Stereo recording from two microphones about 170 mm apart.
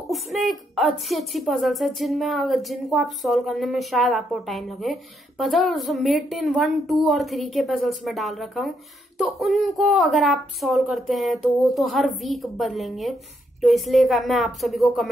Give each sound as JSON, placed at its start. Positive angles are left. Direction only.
{"t": 0.1, "sound": "a woman's voice", "side_deg": 0}